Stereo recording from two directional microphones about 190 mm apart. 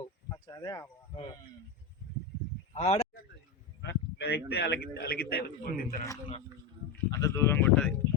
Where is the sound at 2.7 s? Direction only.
35° left (ahead or behind).